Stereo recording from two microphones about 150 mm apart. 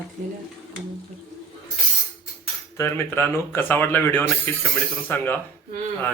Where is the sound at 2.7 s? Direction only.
20° left (ahead or behind).